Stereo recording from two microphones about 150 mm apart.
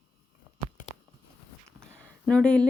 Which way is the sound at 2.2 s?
5° left (ahead or behind).